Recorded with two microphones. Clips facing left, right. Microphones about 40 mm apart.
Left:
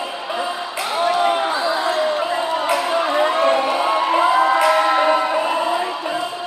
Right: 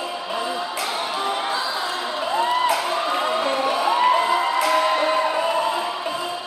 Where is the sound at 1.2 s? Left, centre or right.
Left.